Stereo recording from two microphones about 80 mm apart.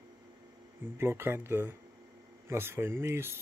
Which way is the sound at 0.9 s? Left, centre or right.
Right.